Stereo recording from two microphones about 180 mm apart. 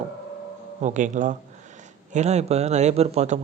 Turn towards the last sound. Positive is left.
turn(degrees=-35)  # may be behind; listen again after turning